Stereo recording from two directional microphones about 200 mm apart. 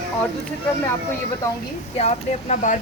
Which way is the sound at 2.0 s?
35° left (ahead or behind).